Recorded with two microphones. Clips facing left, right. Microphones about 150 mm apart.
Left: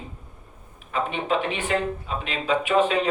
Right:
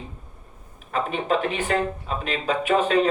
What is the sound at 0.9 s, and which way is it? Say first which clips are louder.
Speech: right 1 dB; 40° right (ahead or behind).